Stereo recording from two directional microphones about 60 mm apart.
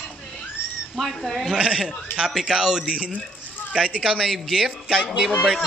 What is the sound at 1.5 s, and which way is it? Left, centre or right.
A man's voice, centre.